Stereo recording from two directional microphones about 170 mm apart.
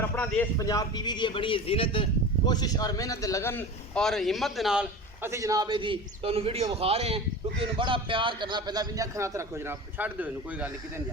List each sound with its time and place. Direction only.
0.0 s a man's voice: 10° left (ahead or behind); by 11.0 s 10° right (ahead or behind)